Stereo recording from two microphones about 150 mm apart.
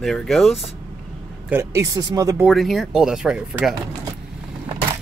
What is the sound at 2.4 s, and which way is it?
Speech, centre (ahead or behind).